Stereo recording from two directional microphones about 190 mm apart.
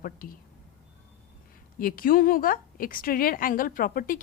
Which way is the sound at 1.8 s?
50° left (ahead or behind).